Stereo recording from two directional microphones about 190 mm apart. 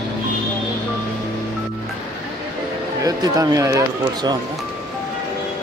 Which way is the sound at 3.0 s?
20° right (ahead or behind).